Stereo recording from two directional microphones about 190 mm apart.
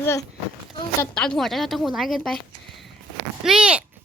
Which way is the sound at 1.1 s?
5° left (ahead or behind).